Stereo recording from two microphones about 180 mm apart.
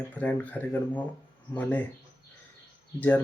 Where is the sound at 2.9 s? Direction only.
10° left (ahead or behind).